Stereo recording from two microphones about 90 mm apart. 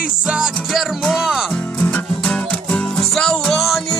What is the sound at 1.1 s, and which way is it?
Music, 5° right (ahead or behind).